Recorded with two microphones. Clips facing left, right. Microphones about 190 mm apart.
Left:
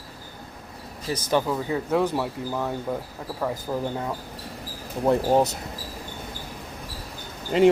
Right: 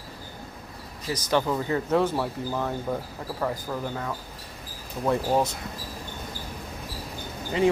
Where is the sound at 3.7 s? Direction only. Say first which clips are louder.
Left 3 dB; 20° left (ahead or behind).